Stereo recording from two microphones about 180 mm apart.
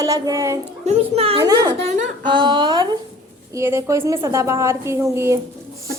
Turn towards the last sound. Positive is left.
turn(degrees=-15)  # may be behind; listen again after turning